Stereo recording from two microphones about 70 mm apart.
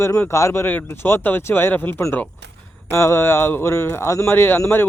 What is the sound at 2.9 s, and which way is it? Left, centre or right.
A man's voice, left.